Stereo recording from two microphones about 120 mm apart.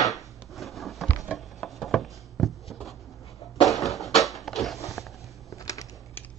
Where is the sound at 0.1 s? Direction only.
Centre (ahead or behind).